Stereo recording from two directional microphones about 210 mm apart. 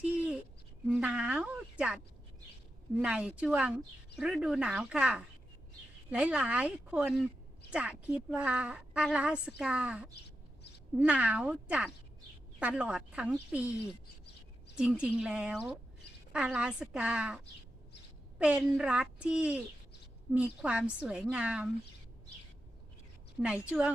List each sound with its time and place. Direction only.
0.9 s a sound: 5° right (ahead or behind)
3.0 s a woman's voice: 5° right (ahead or behind)
14.8 s a woman's voice: 5° right (ahead or behind)
23.6 s a woman's voice: 5° right (ahead or behind)